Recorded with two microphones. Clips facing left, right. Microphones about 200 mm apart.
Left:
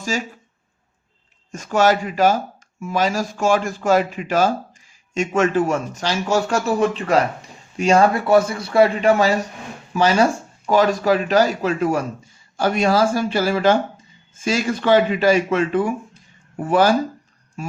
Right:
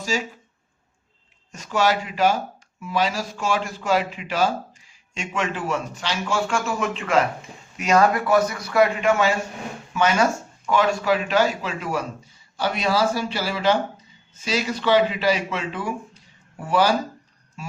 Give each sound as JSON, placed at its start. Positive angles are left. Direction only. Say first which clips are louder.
{"t": 1.5, "sound": "a man's voice", "louder": "left 5 dB", "side_deg": 50}